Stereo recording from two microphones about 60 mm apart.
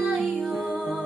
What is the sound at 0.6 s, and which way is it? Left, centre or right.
Music, right.